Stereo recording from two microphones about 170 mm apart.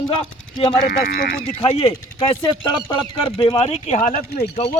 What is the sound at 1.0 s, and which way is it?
Speech, 60° left (ahead or behind).